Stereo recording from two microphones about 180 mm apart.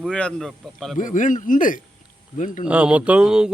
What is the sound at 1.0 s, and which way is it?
A man's voice, 45° left (ahead or behind).